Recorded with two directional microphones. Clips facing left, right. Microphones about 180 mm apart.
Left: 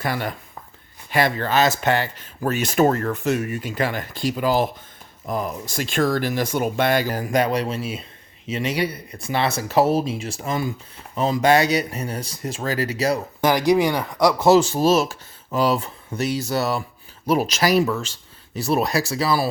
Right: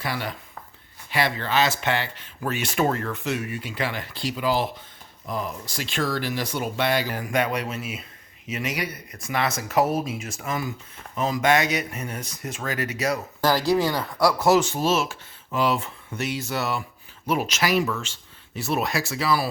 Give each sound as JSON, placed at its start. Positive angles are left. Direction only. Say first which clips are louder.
{"t": 0.0, "sound": "speech", "louder": "left 4 dB", "side_deg": 50}
{"t": 13.4, "sound": "speech", "louder": "left 3 dB", "side_deg": 20}